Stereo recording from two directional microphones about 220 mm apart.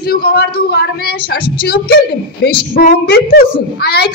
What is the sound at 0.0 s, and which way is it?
A man's voice, 45° left (ahead or behind).